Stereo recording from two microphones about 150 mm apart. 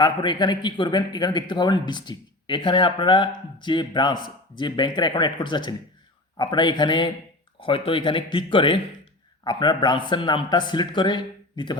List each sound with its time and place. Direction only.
0.0 s a man's voice: 30° left (ahead or behind)